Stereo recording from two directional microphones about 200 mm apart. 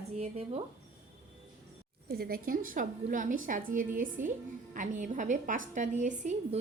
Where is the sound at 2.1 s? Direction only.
50° right (ahead or behind).